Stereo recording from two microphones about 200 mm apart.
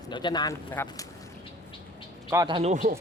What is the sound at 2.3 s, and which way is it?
Speech, 20° right (ahead or behind).